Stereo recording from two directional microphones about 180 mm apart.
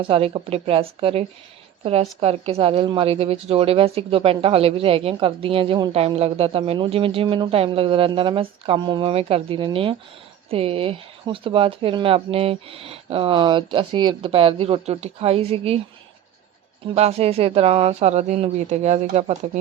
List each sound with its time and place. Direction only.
0.0 s a woman's voice: 30° right (ahead or behind)
16.8 s a woman's voice: 35° right (ahead or behind)